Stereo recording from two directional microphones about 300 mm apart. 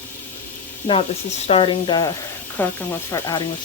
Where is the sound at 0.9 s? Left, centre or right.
Centre.